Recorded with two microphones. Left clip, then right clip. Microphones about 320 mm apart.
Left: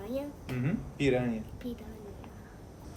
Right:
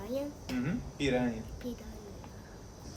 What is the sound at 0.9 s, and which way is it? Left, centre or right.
Speech, left.